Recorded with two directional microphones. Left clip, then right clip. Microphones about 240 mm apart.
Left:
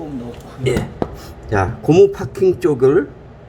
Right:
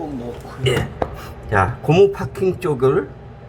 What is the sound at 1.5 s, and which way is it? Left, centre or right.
A man's voice, left.